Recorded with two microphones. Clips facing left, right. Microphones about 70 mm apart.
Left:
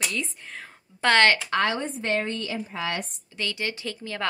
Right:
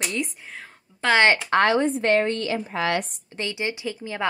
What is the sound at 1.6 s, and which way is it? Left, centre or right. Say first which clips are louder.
A woman's voice: right 6 dB; right.